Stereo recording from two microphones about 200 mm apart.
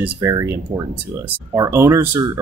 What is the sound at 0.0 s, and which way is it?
Speech, 15° right (ahead or behind).